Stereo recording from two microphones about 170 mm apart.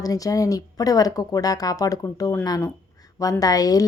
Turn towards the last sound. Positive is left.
turn(degrees=20)  # may be behind; listen again after turning